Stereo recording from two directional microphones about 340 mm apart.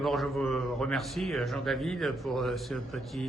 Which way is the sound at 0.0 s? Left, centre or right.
Centre.